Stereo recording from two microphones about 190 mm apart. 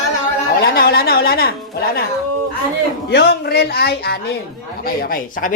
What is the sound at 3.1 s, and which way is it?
A man's voice, 60° left (ahead or behind).